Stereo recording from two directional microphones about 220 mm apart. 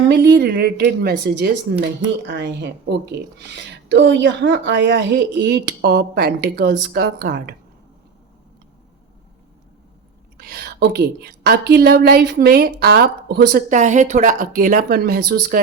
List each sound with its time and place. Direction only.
0.1 s speech: 55° right (ahead or behind)
10.3 s speech: 45° right (ahead or behind)